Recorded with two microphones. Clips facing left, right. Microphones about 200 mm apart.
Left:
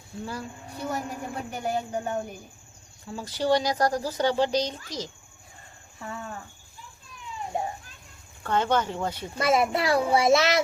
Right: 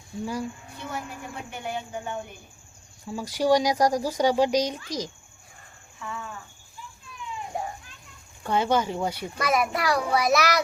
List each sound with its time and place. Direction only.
0.7 s speech: 40° left (ahead or behind)
3.1 s speech: 10° right (ahead or behind)
6.0 s speech: 40° left (ahead or behind)
7.5 s children playing: 25° left (ahead or behind)
8.4 s speech: 10° right (ahead or behind)
9.4 s a child's voice: 25° left (ahead or behind)